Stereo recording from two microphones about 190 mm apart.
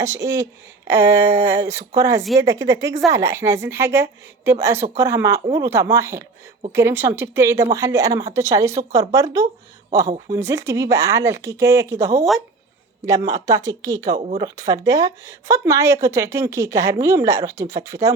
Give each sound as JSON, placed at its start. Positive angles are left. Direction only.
{"t": 0.0, "sound": "speech", "side_deg": -15}